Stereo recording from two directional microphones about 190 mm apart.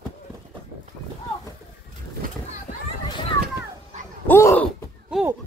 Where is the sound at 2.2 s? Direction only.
45° right (ahead or behind).